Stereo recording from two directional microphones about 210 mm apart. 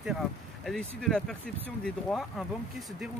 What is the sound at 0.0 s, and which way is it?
Speech, centre (ahead or behind).